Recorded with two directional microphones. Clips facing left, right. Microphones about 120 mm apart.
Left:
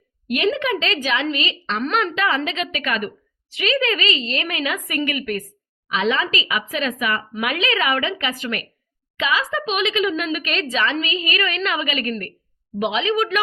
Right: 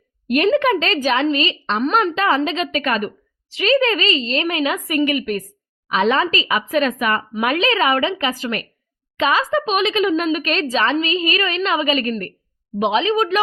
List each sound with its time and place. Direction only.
0.3 s a woman's voice: 45° right (ahead or behind); by 5.5 s 25° right (ahead or behind)
5.9 s a woman's voice: 40° right (ahead or behind)